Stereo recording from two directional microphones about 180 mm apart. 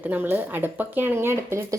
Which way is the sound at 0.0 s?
10° right (ahead or behind).